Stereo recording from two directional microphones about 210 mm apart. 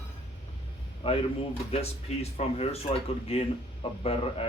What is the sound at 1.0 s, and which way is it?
Speech, 25° left (ahead or behind).